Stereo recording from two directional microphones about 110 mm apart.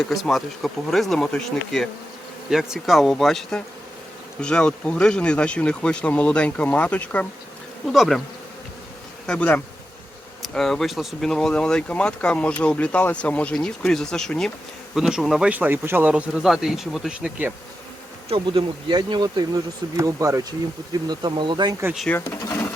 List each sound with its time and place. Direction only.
0.1 s speech: centre (ahead or behind)
7.9 s speech: centre (ahead or behind)
9.2 s speech: 10° left (ahead or behind); by 17.5 s 10° right (ahead or behind)
18.3 s speech: 50° right (ahead or behind); by 20.5 s 30° right (ahead or behind)
21.1 s speech: 45° right (ahead or behind)
22.1 s speech: 20° left (ahead or behind)